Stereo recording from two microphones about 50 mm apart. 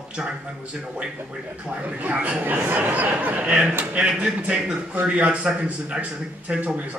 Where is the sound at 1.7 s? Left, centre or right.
Right.